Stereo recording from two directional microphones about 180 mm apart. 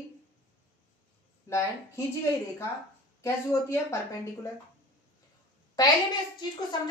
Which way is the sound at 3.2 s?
15° left (ahead or behind).